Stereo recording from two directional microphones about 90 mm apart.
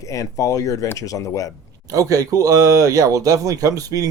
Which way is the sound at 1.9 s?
40° right (ahead or behind).